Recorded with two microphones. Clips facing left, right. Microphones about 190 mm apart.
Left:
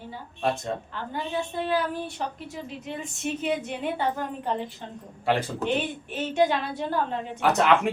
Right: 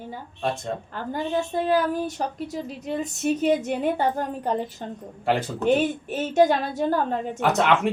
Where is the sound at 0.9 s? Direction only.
45° right (ahead or behind).